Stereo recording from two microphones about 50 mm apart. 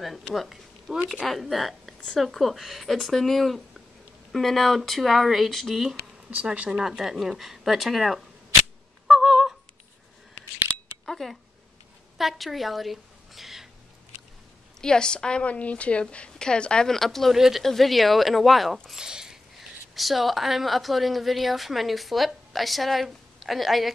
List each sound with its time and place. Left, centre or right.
0.0 s a woman's voice: centre
6.3 s speech: right
6.7 s a woman's voice: centre
9.2 s a sound: centre
11.1 s a sound: centre
12.2 s a woman's voice: centre
14.8 s a woman's voice: centre
16.8 s a woman's voice: centre
17.4 s a woman's voice: centre
18.9 s a sound: centre
20.0 s a woman's voice: centre